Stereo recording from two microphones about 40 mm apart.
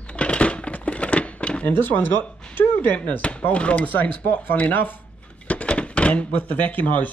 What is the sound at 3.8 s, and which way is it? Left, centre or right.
Speech, left.